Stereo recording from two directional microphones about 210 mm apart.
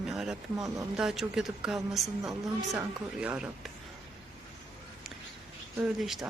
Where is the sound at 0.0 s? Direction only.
Centre (ahead or behind).